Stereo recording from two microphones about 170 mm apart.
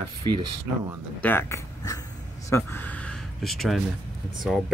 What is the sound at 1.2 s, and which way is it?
Speech, 10° left (ahead or behind).